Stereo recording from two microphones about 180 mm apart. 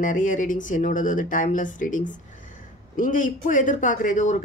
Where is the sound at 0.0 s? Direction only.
45° left (ahead or behind).